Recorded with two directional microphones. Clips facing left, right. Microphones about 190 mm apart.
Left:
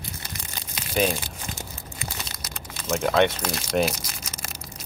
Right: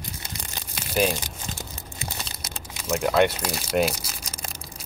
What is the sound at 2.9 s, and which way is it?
Speech, 5° right (ahead or behind).